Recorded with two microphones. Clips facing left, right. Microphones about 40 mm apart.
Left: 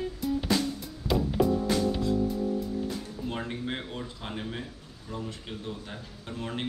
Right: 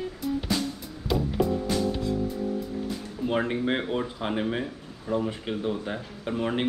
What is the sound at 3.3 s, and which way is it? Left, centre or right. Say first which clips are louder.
Speech: right 9 dB; right.